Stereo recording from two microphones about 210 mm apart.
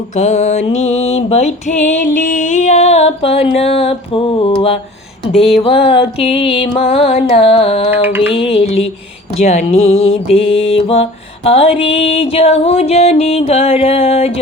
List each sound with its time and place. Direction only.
0.2 s music: 35° left (ahead or behind)
5.4 s music: centre (ahead or behind)
5.6 s music: 25° left (ahead or behind)
8.0 s music: 10° right (ahead or behind)
8.3 s music: 25° left (ahead or behind)
9.9 s mantra: 75° left (ahead or behind)
10.3 s music: 25° left (ahead or behind)